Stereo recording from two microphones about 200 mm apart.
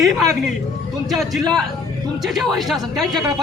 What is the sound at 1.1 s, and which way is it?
A man's voice, centre (ahead or behind).